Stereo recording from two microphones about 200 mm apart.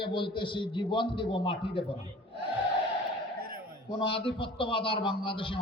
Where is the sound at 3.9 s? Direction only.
25° left (ahead or behind).